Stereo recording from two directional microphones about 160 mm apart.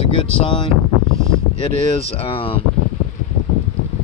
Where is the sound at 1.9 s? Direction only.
40° left (ahead or behind).